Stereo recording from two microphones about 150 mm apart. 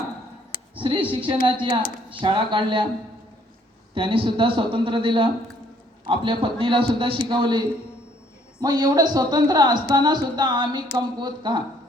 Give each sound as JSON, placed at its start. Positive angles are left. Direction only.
{"t": 0.8, "sound": "speech", "side_deg": -35}
{"t": 3.9, "sound": "speech", "side_deg": -35}